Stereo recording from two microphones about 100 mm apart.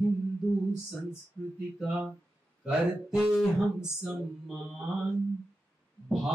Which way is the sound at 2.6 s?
10° right (ahead or behind).